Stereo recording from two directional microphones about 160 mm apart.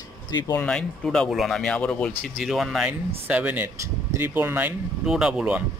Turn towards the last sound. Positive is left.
turn(degrees=-5)  # may be behind; listen again after turning